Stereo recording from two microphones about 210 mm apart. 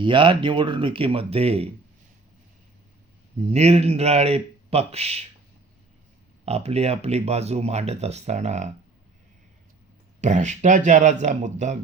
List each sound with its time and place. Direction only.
0.0 s speech: 25° right (ahead or behind)
3.5 s speech: 30° right (ahead or behind)
6.4 s speech: 30° right (ahead or behind)
10.2 s speech: 35° right (ahead or behind)